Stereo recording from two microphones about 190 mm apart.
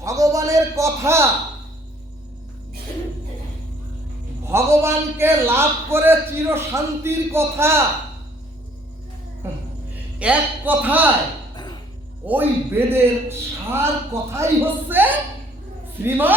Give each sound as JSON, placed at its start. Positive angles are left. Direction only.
{"t": 0.0, "sound": "a man's voice", "side_deg": -15}
{"t": 4.4, "sound": "a man's voice", "side_deg": -15}
{"t": 10.2, "sound": "a man's voice", "side_deg": -5}
{"t": 11.5, "sound": "music", "side_deg": 20}
{"t": 12.2, "sound": "a man's voice", "side_deg": -10}